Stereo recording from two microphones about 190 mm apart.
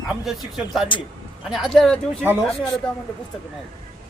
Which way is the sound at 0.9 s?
25° left (ahead or behind).